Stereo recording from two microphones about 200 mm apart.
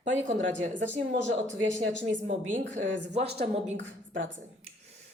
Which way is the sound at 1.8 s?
70° right (ahead or behind).